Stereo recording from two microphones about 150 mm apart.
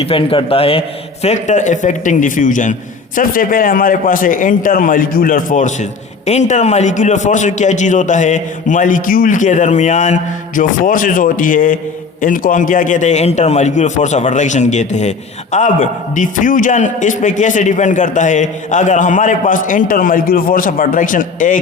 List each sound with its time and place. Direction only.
0.0 s a man's voice: 40° left (ahead or behind); by 21.6 s 60° left (ahead or behind)